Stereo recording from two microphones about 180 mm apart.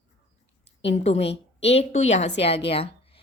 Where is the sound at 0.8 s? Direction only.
35° left (ahead or behind).